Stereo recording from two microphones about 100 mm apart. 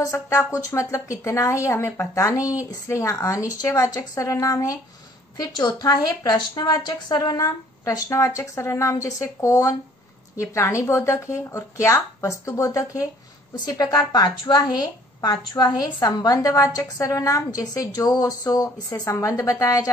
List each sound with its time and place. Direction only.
0.0 s a woman's voice: 30° left (ahead or behind)